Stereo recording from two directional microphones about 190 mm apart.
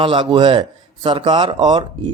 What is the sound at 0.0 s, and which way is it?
A man's voice, 25° right (ahead or behind).